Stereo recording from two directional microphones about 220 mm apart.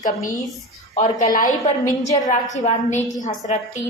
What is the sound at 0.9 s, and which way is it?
A woman's voice, 35° left (ahead or behind).